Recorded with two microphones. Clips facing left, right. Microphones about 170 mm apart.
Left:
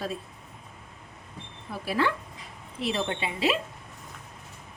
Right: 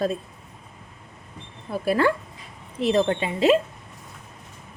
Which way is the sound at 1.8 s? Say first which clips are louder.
Right 6 dB; 50° right (ahead or behind).